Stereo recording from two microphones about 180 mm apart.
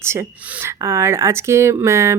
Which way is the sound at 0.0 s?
15° right (ahead or behind).